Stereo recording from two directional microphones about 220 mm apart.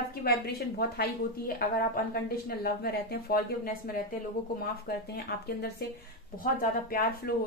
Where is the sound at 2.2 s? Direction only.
45° left (ahead or behind).